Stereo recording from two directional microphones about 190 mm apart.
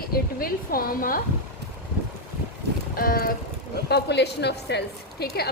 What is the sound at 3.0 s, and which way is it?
Speech, 50° left (ahead or behind).